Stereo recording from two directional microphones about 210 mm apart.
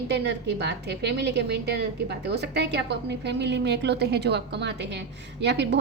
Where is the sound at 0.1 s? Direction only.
50° right (ahead or behind).